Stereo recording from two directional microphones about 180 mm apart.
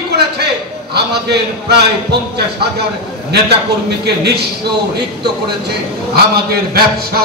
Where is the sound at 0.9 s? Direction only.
65° right (ahead or behind).